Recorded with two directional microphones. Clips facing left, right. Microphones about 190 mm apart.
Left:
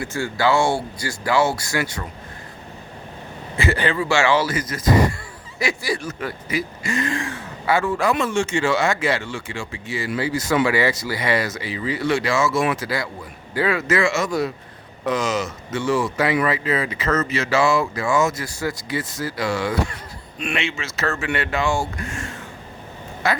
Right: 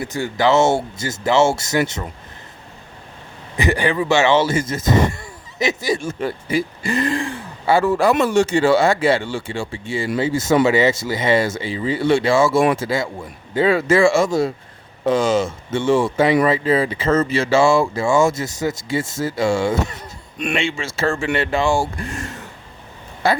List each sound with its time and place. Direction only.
0.0 s speech: 20° right (ahead or behind)
3.6 s speech: 15° right (ahead or behind); by 23.4 s 30° right (ahead or behind)